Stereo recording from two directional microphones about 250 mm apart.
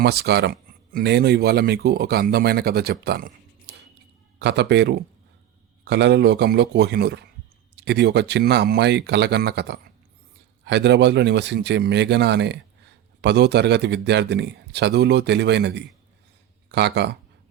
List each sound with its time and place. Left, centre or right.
0.0 s a man's voice: right